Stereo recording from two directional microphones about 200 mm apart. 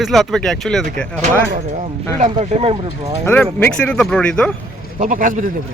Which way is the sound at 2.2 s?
35° right (ahead or behind).